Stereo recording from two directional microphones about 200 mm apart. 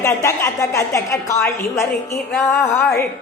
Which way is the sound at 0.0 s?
15° left (ahead or behind).